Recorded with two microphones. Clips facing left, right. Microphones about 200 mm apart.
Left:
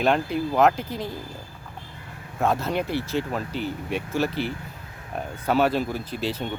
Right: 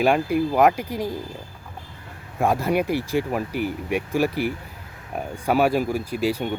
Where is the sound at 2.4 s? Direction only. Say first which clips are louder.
Right 3 dB; 10° right (ahead or behind).